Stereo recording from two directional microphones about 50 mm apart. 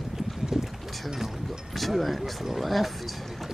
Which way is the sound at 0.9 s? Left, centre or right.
Centre.